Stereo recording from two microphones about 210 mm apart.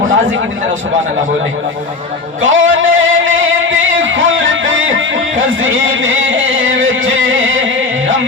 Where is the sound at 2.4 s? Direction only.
65° right (ahead or behind).